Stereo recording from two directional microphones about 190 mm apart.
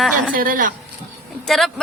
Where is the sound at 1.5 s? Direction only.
Centre (ahead or behind).